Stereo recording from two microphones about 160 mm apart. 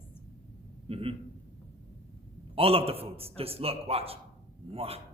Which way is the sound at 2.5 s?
35° right (ahead or behind).